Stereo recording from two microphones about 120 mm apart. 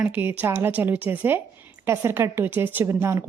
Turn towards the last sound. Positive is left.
turn(degrees=-25)  # may be behind; listen again after turning